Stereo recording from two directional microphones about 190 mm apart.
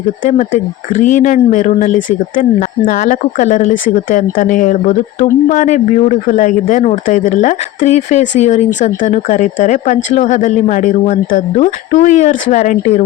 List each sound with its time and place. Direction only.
0.3 s speech: 40° left (ahead or behind)